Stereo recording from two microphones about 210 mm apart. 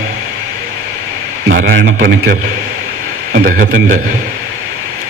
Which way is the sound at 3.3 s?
40° right (ahead or behind).